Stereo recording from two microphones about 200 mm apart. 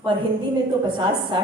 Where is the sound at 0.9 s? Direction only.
25° right (ahead or behind).